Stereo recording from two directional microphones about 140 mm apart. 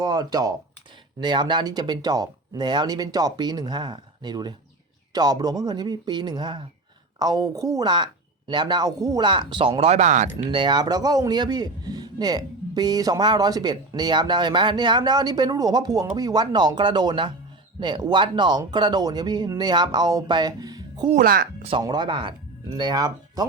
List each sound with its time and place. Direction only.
0.0 s speech: 30° right (ahead or behind); by 10.2 s 55° right (ahead or behind)
10.5 s speech: 35° right (ahead or behind)
21.1 s speech: 80° right
21.8 s speech: 30° right (ahead or behind)